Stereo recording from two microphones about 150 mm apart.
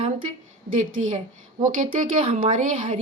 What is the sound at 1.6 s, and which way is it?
Speech, 55° right (ahead or behind).